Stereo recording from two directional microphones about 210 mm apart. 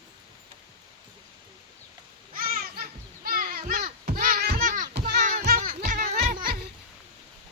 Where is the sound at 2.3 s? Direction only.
45° right (ahead or behind).